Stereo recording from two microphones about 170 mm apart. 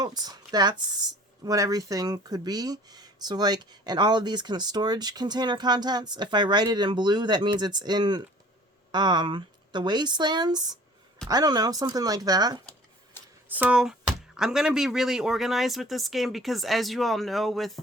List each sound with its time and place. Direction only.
0.0 s a woman's voice: 25° right (ahead or behind)
13.5 s speech: 10° right (ahead or behind)